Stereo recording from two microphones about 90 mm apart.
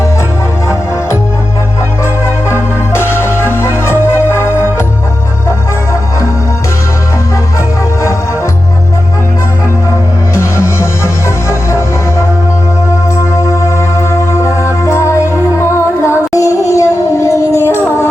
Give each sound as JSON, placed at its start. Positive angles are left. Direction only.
{"t": 2.2, "sound": "music", "side_deg": 30}
{"t": 10.3, "sound": "music", "side_deg": 30}